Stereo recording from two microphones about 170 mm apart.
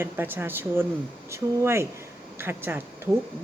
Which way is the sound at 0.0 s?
10° right (ahead or behind).